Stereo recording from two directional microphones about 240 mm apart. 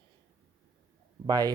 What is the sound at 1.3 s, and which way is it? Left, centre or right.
Speech, centre.